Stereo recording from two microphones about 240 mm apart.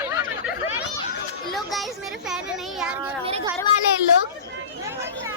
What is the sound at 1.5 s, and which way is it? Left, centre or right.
A child's voice, centre.